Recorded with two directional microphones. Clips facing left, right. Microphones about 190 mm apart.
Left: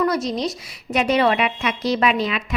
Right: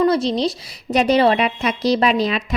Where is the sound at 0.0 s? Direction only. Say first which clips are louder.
Right 4 dB; 30° right (ahead or behind).